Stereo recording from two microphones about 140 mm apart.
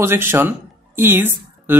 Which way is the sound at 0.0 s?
15° right (ahead or behind).